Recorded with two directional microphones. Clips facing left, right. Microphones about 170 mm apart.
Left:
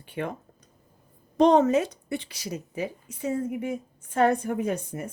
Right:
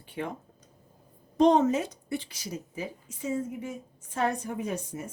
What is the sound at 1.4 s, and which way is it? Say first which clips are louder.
A woman's voice: left 3 dB; 70° left (ahead or behind).